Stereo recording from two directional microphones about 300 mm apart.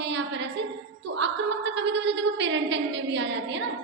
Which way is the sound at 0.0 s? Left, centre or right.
Right.